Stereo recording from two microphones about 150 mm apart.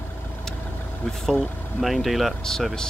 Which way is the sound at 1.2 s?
Centre (ahead or behind).